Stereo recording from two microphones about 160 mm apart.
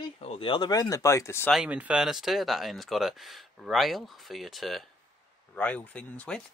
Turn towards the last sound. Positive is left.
turn(degrees=10)  # may be behind; listen again after turning